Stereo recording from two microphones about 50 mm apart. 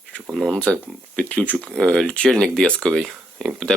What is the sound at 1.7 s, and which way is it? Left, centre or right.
Speech, centre.